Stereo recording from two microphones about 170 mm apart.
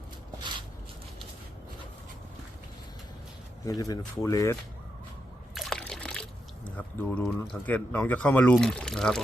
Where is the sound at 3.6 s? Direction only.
20° left (ahead or behind).